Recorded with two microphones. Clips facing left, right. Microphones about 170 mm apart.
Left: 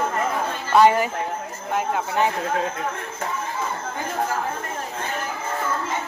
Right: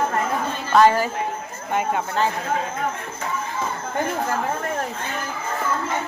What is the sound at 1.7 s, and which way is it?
Speech, centre (ahead or behind).